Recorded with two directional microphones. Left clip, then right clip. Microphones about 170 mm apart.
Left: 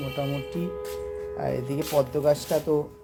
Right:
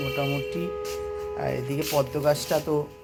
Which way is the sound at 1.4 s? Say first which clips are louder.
Left 1 dB; 15° left (ahead or behind).